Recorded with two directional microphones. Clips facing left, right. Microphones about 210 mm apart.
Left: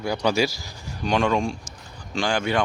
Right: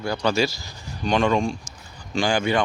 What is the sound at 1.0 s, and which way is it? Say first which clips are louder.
Speech: right 1 dB; 5° left (ahead or behind).